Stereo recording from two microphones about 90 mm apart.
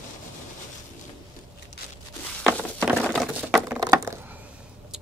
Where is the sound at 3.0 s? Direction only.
Centre (ahead or behind).